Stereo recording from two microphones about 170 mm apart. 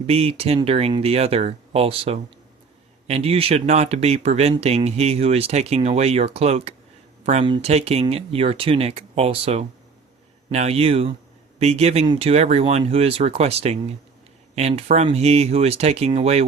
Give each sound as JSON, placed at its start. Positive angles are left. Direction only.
{"t": 0.1, "sound": "speech", "side_deg": -35}
{"t": 7.4, "sound": "speech", "side_deg": -30}